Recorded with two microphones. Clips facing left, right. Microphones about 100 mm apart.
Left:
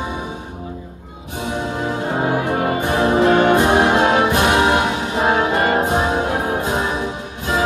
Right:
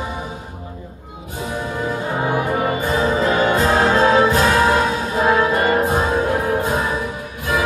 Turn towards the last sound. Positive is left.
turn(degrees=25)  # may be behind; listen again after turning